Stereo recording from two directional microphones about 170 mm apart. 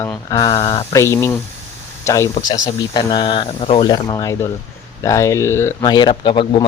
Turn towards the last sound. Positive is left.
turn(degrees=30)  # may be behind; listen again after turning